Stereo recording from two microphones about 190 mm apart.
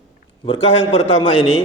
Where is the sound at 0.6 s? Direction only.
75° left (ahead or behind).